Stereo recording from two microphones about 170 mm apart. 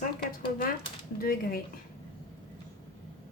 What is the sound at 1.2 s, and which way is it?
Speech, 60° left (ahead or behind).